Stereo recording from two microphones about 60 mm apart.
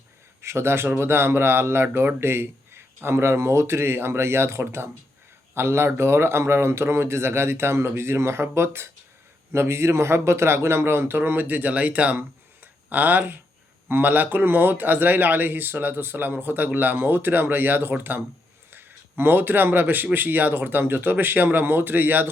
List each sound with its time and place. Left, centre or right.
0.4 s speech: right